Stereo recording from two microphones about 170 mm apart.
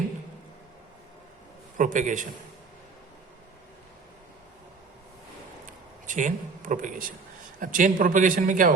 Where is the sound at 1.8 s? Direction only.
50° right (ahead or behind).